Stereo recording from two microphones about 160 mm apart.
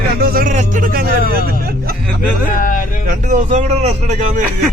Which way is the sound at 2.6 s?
60° left (ahead or behind).